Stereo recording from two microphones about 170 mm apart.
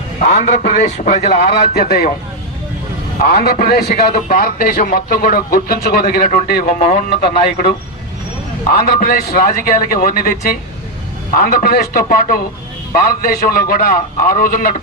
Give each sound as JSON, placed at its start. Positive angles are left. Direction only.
{"t": 0.3, "sound": "a man's voice", "side_deg": 45}
{"t": 3.3, "sound": "a man's voice", "side_deg": 60}
{"t": 8.9, "sound": "a man's voice", "side_deg": 60}
{"t": 11.3, "sound": "a man's voice", "side_deg": 55}